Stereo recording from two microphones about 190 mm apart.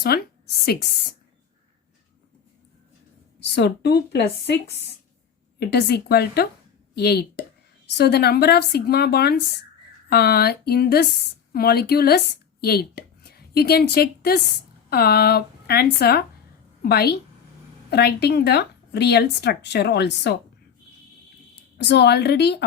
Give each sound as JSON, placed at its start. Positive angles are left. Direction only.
{"t": 0.0, "sound": "a woman's voice", "side_deg": 55}
{"t": 3.5, "sound": "a woman's voice", "side_deg": 60}
{"t": 21.8, "sound": "speech", "side_deg": 60}